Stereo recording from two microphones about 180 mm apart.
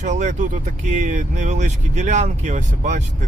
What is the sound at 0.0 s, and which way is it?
Speech, 40° right (ahead or behind).